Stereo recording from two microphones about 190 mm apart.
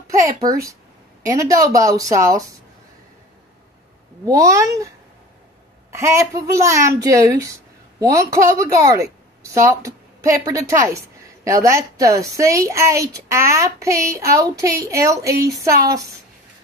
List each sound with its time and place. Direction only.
0.4 s a woman's voice: 20° right (ahead or behind)
4.3 s a woman's voice: 15° right (ahead or behind)